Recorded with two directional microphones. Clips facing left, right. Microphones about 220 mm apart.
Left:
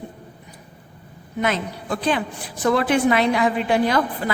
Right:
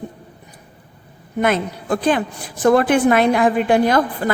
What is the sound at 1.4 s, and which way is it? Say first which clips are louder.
A woman's voice: right 5 dB; 50° right (ahead or behind).